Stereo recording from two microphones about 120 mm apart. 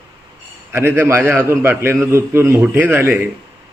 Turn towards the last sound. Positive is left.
turn(degrees=-20)  # may be behind; listen again after turning